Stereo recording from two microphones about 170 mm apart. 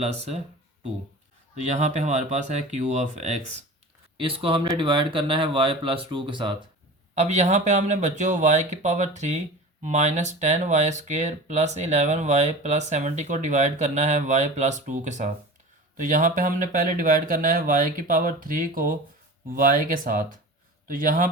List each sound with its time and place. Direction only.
0.0 s speech: 40° right (ahead or behind)
1.5 s speech: 40° right (ahead or behind)
7.2 s speech: 45° right (ahead or behind)